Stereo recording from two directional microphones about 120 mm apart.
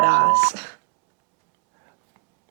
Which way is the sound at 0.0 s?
15° right (ahead or behind).